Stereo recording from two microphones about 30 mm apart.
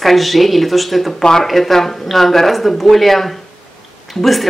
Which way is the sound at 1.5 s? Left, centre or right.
Centre.